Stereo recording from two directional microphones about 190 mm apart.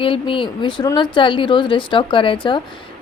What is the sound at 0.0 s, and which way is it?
A woman's voice, 30° left (ahead or behind).